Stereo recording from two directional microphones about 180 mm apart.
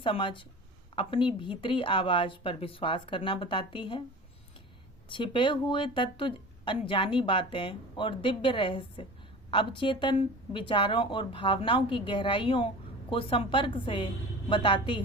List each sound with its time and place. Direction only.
0.0 s speech: 30° left (ahead or behind)
5.0 s speech: 25° left (ahead or behind)